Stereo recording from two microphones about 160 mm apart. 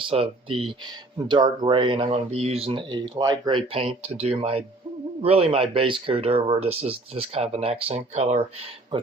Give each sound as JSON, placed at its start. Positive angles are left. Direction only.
{"t": 0.1, "sound": "speech", "side_deg": -35}
{"t": 8.9, "sound": "speech", "side_deg": -35}